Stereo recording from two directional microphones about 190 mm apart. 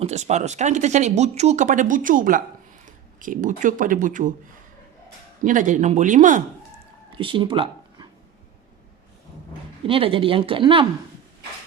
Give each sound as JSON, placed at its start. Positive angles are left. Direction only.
{"t": 0.0, "sound": "speech", "side_deg": -35}
{"t": 5.4, "sound": "speech", "side_deg": -40}
{"t": 7.1, "sound": "a sound", "side_deg": -25}
{"t": 9.8, "sound": "speech", "side_deg": -30}